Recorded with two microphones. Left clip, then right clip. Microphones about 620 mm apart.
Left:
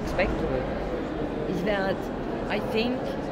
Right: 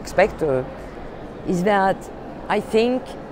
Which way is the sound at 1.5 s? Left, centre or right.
Right.